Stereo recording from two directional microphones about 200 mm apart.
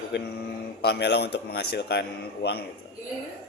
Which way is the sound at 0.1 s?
60° left (ahead or behind).